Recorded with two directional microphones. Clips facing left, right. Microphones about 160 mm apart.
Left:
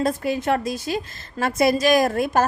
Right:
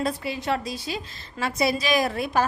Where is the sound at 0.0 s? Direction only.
45° left (ahead or behind).